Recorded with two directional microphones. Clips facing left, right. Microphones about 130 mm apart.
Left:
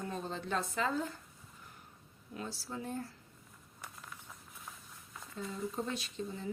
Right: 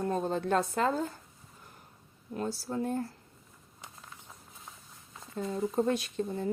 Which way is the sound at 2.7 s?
50° right (ahead or behind).